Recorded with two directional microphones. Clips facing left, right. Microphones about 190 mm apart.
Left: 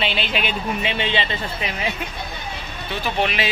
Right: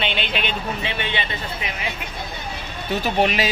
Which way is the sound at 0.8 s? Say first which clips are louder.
Left 3 dB; 20° left (ahead or behind).